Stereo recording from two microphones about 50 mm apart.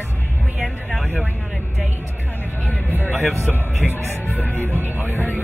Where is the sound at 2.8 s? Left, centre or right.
Right.